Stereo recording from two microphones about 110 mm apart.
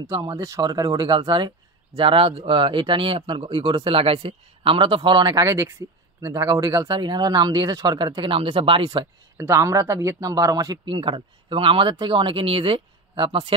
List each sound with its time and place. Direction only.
0.4 s speech: 35° right (ahead or behind)
5.3 s speech: 30° right (ahead or behind)
6.9 s speech: 45° right (ahead or behind)
9.4 s speech: 25° right (ahead or behind)
10.9 s speech: 50° right (ahead or behind)